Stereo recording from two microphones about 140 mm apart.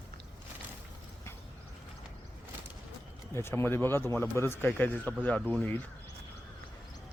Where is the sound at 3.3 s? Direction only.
15° left (ahead or behind).